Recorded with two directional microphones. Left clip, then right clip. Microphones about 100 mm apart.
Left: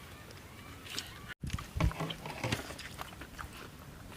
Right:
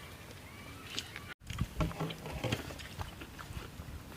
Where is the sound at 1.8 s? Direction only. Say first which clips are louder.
Left 2 dB; 45° left (ahead or behind).